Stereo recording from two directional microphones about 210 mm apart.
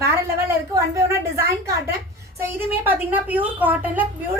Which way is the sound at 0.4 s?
15° right (ahead or behind).